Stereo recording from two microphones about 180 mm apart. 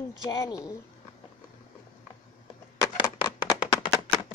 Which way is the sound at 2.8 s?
25° left (ahead or behind).